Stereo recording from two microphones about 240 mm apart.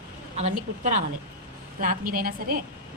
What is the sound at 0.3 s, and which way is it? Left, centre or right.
A woman's voice, right.